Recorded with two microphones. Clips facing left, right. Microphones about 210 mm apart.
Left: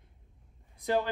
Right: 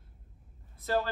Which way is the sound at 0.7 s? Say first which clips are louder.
Left 1 dB; 15° left (ahead or behind).